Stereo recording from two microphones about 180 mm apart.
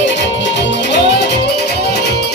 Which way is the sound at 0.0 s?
80° left.